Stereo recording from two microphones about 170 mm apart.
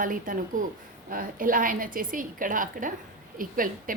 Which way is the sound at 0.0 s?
50° right (ahead or behind).